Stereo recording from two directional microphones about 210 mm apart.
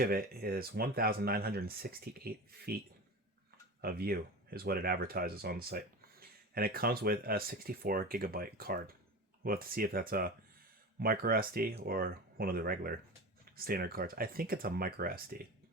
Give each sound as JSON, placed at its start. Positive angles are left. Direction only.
{"t": 0.0, "sound": "speech", "side_deg": -45}